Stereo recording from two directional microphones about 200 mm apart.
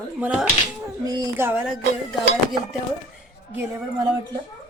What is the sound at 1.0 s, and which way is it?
Speech, 20° right (ahead or behind).